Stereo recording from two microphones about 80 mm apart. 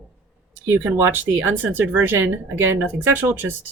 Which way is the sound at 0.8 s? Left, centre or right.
Right.